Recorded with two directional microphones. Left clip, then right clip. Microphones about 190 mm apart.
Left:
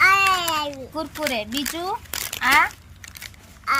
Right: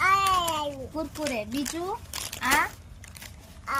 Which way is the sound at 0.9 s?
5° left (ahead or behind).